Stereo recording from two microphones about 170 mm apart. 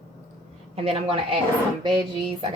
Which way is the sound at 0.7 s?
35° right (ahead or behind).